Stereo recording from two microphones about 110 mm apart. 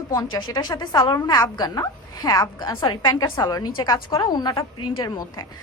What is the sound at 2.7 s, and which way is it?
A woman's voice, 50° left (ahead or behind).